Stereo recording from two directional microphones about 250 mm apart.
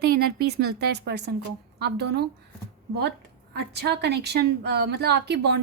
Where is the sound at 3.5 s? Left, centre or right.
Right.